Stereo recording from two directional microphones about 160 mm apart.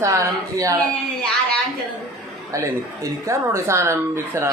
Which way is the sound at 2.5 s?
20° right (ahead or behind).